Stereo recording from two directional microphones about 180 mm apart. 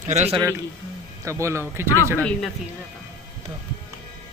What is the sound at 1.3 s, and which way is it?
Speech, 15° right (ahead or behind).